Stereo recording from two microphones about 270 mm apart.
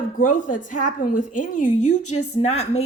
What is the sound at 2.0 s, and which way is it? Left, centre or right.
Speech, left.